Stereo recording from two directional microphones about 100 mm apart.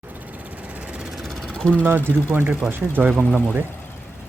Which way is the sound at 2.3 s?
20° right (ahead or behind).